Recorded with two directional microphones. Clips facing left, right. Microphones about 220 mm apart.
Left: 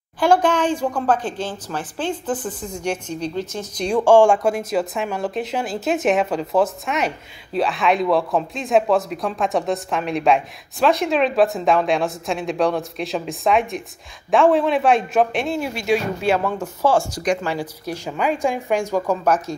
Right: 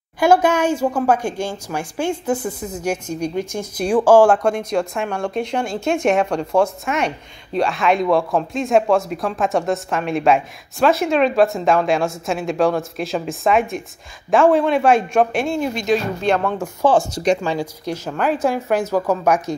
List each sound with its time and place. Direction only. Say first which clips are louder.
0.2 s a woman's voice: right 2 dB; 10° right (ahead or behind)
4.3 s speech: right 1 dB; 5° left (ahead or behind)
16.5 s a woman's voice: right 2 dB; 15° right (ahead or behind)
17.4 s a woman's voice: right 3 dB; 15° right (ahead or behind)
17.8 s speech: right 2 dB; 10° left (ahead or behind)
18.2 s a woman's voice: right 2 dB; 5° right (ahead or behind)